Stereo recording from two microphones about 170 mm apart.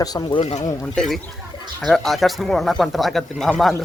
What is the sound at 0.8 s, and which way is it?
Speech, 5° left (ahead or behind).